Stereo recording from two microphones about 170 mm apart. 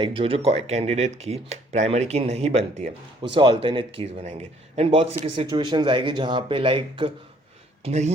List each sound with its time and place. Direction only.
0.0 s speech: 30° right (ahead or behind)
7.9 s speech: 40° right (ahead or behind)